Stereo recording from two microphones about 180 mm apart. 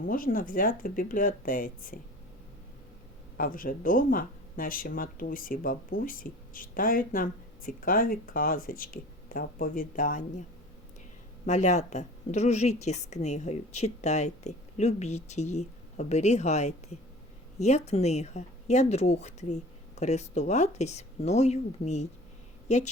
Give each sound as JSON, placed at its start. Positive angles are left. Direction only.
{"t": 0.0, "sound": "speech", "side_deg": 50}
{"t": 3.3, "sound": "speech", "side_deg": 50}
{"t": 11.4, "sound": "a woman's voice", "side_deg": 40}